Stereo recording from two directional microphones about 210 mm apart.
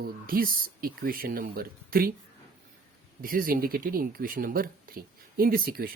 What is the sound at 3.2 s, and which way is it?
Speech, 40° right (ahead or behind).